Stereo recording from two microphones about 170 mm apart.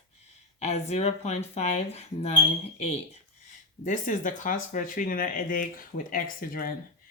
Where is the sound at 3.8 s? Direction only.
50° left (ahead or behind).